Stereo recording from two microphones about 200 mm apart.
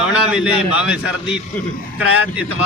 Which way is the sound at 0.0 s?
5° right (ahead or behind).